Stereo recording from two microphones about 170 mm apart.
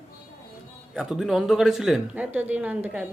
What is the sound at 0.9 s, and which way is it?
A woman's voice, 5° right (ahead or behind).